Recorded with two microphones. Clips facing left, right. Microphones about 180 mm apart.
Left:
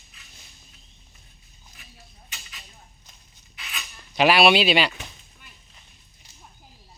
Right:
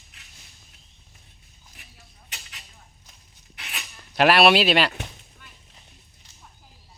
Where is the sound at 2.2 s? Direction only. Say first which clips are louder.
Right 1 dB; 70° right (ahead or behind).